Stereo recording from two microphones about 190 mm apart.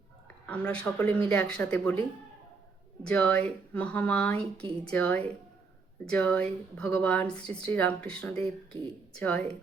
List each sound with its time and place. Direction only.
0.4 s speech: 5° left (ahead or behind)